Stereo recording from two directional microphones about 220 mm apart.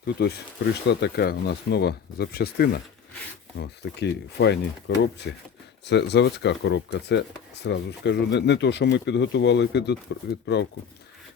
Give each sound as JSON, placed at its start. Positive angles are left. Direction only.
{"t": 0.0, "sound": "speech", "side_deg": 45}